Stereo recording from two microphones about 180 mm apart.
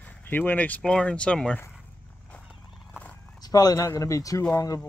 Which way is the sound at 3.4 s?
20° left (ahead or behind).